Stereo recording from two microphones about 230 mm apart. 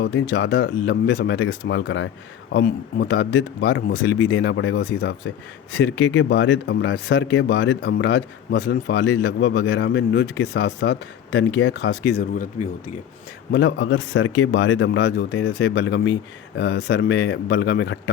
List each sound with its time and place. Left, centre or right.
0.0 s speech: left
13.5 s speech: left